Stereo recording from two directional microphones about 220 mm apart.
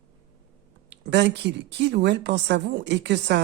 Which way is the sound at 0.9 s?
50° right (ahead or behind).